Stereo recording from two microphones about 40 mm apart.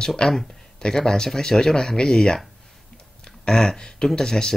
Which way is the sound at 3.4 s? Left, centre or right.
Centre.